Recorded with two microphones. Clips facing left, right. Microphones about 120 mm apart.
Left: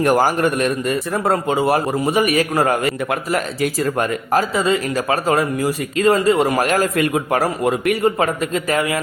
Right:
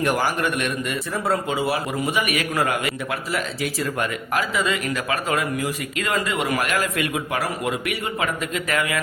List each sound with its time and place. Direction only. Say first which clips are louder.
0.0 s speech: left 6 dB; 40° left (ahead or behind)